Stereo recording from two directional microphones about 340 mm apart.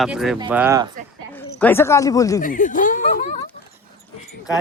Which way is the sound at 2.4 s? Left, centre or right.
Left.